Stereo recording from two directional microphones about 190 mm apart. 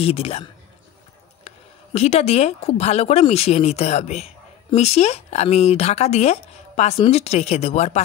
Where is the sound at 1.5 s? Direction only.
35° left (ahead or behind).